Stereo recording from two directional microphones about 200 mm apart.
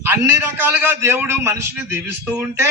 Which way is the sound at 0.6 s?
10° right (ahead or behind).